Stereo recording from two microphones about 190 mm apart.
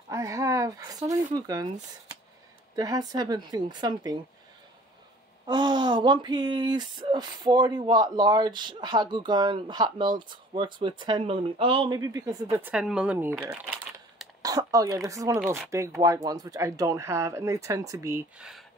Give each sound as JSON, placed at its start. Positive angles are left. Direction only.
{"t": 0.1, "sound": "speech", "side_deg": -15}
{"t": 5.5, "sound": "speech", "side_deg": -25}
{"t": 12.7, "sound": "speech", "side_deg": -5}